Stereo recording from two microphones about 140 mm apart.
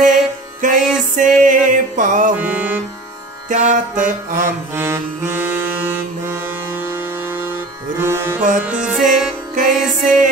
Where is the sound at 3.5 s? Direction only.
65° right (ahead or behind).